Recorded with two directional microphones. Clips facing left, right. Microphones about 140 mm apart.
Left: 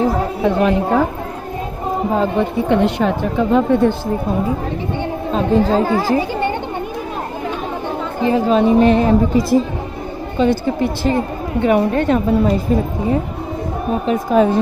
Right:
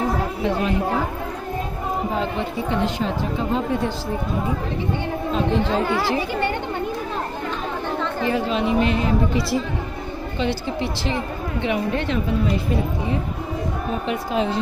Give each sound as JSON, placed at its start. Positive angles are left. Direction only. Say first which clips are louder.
{"t": 0.4, "sound": "a woman's voice", "louder": "left 9 dB", "side_deg": 60}
{"t": 2.1, "sound": "a woman's voice", "louder": "left 7 dB", "side_deg": 55}
{"t": 5.3, "sound": "speech", "louder": "left 7 dB", "side_deg": 40}
{"t": 8.2, "sound": "a woman's voice", "louder": "left 9 dB", "side_deg": 35}
{"t": 14.0, "sound": "a woman's voice", "louder": "left 10 dB", "side_deg": 45}